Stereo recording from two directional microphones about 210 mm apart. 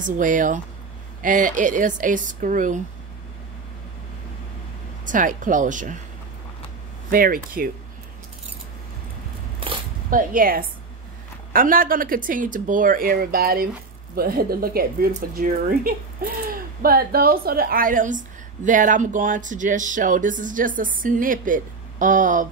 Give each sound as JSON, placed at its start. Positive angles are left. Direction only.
{"t": 0.0, "sound": "speech", "side_deg": -40}
{"t": 5.0, "sound": "speech", "side_deg": -40}
{"t": 7.1, "sound": "speech", "side_deg": -45}
{"t": 10.0, "sound": "speech", "side_deg": -40}